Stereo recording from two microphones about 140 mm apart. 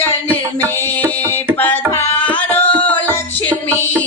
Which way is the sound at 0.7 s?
15° left (ahead or behind).